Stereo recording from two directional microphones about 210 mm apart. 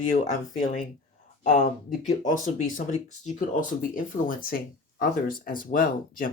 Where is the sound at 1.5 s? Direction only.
40° left (ahead or behind).